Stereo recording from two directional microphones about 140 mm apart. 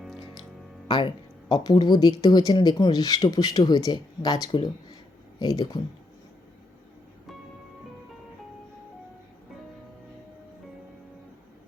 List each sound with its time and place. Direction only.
0.9 s speech: 35° left (ahead or behind)